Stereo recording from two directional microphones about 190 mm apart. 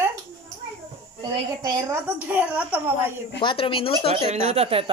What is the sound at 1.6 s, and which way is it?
Speech, 20° right (ahead or behind).